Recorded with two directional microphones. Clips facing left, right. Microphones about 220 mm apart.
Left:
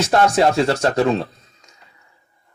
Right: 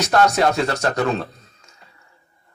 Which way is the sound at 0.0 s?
25° left (ahead or behind).